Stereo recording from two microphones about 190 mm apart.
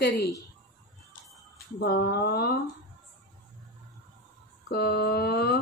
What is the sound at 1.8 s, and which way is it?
Speech, 60° left (ahead or behind).